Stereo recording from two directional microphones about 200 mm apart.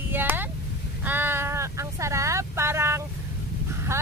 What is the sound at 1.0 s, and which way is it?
Vehicle, 10° right (ahead or behind).